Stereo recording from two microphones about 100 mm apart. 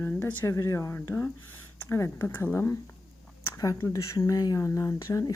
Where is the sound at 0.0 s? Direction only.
25° left (ahead or behind).